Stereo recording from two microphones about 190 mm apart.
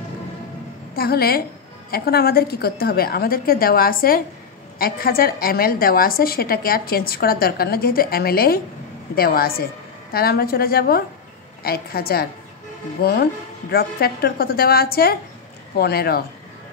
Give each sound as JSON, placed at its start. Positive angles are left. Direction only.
{"t": 0.9, "sound": "a woman's voice", "side_deg": 55}